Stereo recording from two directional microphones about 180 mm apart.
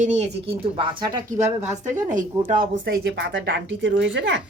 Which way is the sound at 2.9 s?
75° right (ahead or behind).